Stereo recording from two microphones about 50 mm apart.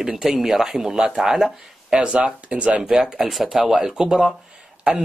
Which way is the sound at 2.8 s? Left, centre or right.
Centre.